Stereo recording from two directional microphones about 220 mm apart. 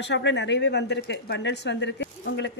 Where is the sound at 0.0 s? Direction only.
55° left (ahead or behind).